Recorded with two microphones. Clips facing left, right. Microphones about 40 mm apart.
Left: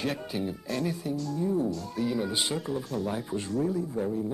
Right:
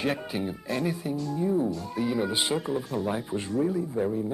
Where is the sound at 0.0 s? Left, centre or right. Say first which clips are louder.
Right 2 dB; centre.